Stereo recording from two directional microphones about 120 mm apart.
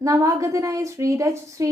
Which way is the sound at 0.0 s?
30° right (ahead or behind).